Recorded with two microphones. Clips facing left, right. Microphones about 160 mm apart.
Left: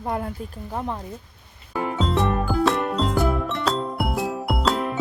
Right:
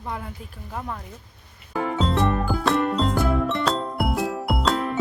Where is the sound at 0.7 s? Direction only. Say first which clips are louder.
Left 3 dB; 25° left (ahead or behind).